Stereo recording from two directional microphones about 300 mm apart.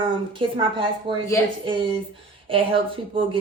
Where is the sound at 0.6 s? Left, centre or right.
Centre.